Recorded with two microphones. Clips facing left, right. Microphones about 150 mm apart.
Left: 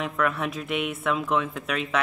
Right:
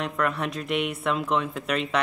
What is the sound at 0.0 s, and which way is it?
Speech, centre (ahead or behind).